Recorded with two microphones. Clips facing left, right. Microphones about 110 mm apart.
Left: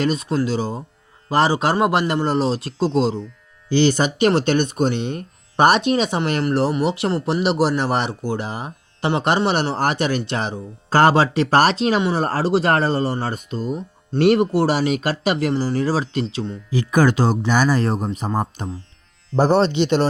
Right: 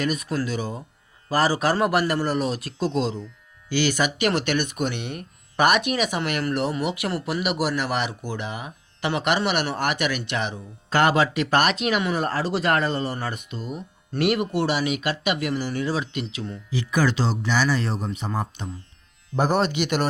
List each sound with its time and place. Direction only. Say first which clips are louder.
0.0 s a man's voice: left 5 dB; 30° left (ahead or behind)
16.7 s speech: left 6 dB; 45° left (ahead or behind)
19.4 s a man's voice: left 6 dB; 30° left (ahead or behind)